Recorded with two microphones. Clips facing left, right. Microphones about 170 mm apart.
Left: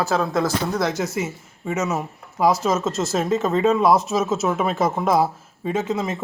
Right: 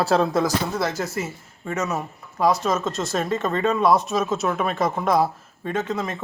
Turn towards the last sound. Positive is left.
turn(degrees=25)  # may be behind; listen again after turning